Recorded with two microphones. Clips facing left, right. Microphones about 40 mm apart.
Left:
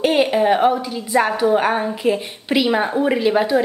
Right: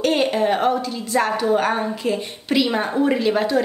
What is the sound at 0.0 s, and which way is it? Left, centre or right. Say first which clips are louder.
A woman's voice: left 3 dB; centre.